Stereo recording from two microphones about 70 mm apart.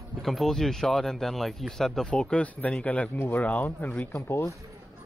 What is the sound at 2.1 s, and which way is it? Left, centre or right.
Speech, centre.